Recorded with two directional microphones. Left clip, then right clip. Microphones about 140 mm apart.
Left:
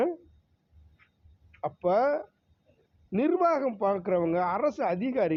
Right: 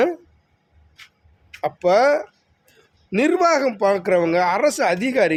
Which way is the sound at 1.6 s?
35° right (ahead or behind).